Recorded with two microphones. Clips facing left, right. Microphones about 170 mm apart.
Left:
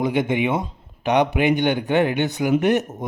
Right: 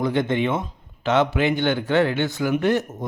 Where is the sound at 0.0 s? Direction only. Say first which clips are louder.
Left 1 dB; 15° left (ahead or behind).